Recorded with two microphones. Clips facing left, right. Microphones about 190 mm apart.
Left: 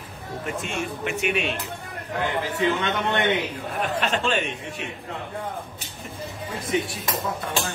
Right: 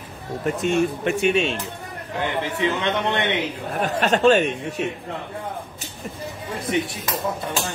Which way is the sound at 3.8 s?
40° right (ahead or behind).